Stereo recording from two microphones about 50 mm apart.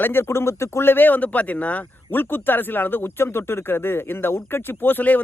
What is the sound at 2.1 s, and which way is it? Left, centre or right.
Speech, left.